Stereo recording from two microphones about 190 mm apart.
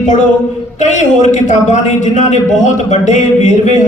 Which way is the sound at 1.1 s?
40° left (ahead or behind).